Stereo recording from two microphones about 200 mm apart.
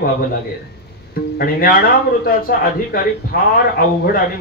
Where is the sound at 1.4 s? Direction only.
45° left (ahead or behind).